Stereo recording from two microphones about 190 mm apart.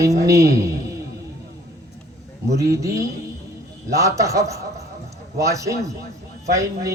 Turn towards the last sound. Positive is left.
turn(degrees=-15)  # may be behind; listen again after turning